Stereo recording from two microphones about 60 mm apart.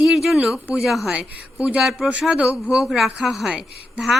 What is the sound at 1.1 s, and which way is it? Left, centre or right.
A woman's voice, centre.